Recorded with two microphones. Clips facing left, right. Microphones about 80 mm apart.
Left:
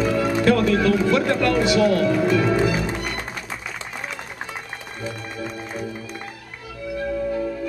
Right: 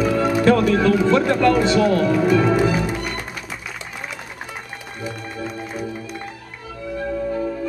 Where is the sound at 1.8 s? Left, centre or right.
Right.